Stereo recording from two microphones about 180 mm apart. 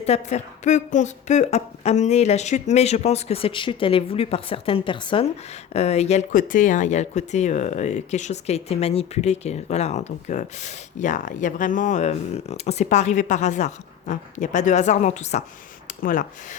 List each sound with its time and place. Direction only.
0.0 s speech: 35° left (ahead or behind)